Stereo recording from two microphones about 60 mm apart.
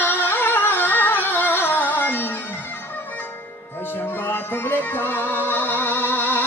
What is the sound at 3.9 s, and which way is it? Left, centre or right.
Music, left.